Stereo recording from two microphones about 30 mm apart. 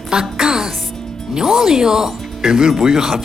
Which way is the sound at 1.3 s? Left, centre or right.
Centre.